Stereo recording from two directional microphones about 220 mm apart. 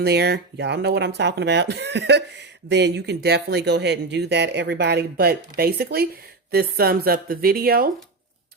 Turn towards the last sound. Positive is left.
turn(degrees=-40)  # may be behind; listen again after turning